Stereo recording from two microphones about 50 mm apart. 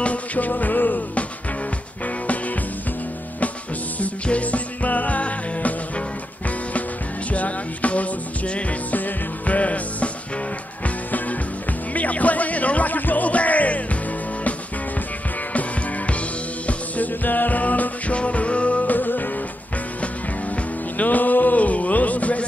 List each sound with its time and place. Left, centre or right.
0.0 s music: left
4.0 s music: left
7.3 s music: left
11.1 s music: left
16.6 s music: left
21.0 s music: left